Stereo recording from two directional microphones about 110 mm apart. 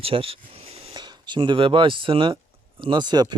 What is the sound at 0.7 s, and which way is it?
Whispering, 60° right (ahead or behind).